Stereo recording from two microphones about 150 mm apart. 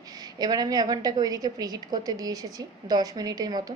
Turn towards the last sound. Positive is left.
turn(degrees=-25)  # may be behind; listen again after turning